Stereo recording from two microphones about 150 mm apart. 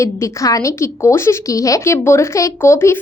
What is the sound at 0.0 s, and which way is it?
A woman's voice, 20° left (ahead or behind).